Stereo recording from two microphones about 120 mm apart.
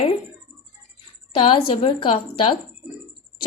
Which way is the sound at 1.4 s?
45° left (ahead or behind).